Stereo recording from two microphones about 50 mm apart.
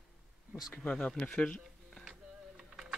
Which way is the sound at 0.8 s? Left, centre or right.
Left.